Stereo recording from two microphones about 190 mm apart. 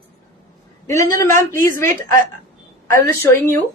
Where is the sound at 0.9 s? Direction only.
15° left (ahead or behind).